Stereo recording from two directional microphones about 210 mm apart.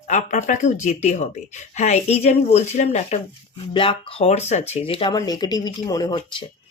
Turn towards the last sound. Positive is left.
turn(degrees=20)  # may be behind; listen again after turning